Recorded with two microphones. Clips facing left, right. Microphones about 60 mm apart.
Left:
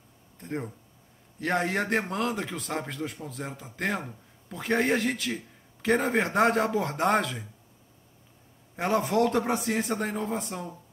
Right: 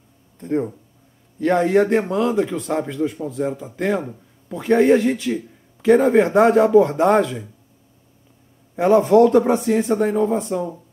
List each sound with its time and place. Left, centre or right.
0.4 s a man's voice: right
8.8 s a man's voice: right
9.6 s a man's voice: centre